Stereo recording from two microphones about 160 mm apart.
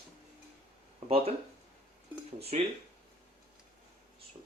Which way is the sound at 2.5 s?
45° right (ahead or behind).